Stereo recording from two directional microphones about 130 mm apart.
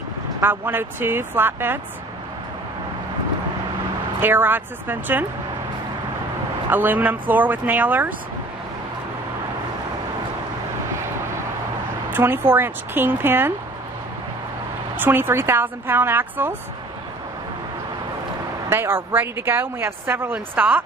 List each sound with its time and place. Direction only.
0.4 s a woman's voice: 15° right (ahead or behind)
4.2 s a woman's voice: 15° right (ahead or behind)
6.7 s a woman's voice: 15° right (ahead or behind)
12.1 s a woman's voice: 15° right (ahead or behind)
15.0 s a woman's voice: 15° right (ahead or behind)
18.7 s a woman's voice: 15° right (ahead or behind)